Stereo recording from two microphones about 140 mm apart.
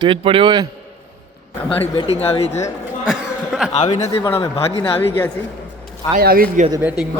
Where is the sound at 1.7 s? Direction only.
45° left (ahead or behind).